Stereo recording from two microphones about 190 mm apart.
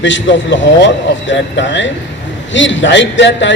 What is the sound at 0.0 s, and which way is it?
A man's voice, 75° left (ahead or behind).